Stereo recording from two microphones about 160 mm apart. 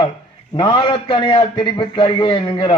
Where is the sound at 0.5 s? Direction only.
30° left (ahead or behind).